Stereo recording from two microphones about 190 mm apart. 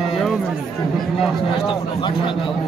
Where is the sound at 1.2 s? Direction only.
30° left (ahead or behind).